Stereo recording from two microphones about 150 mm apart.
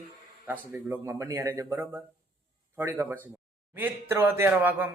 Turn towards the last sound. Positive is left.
turn(degrees=-15)  # may be behind; listen again after turning